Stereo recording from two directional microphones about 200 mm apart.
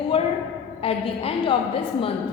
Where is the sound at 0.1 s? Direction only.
30° left (ahead or behind).